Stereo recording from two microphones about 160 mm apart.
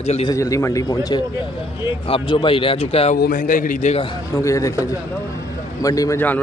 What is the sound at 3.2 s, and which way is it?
Speech, 55° left (ahead or behind).